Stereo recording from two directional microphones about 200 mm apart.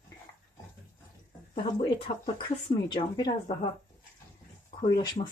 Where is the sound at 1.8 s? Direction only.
25° left (ahead or behind).